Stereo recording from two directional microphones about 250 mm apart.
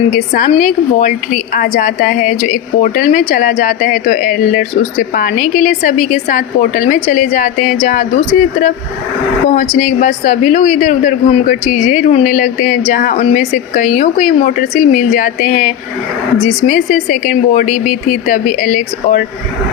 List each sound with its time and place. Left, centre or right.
0.1 s a woman's voice: left
9.7 s a man's voice: left